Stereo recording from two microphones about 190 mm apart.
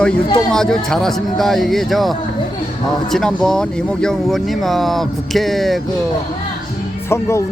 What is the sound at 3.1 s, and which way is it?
Speech, 5° left (ahead or behind).